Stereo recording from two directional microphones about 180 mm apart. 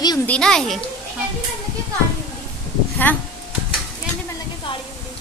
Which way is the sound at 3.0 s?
10° left (ahead or behind).